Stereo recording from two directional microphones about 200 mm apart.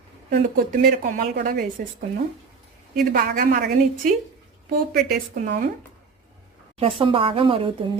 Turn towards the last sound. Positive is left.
turn(degrees=-25)  # may be behind; listen again after turning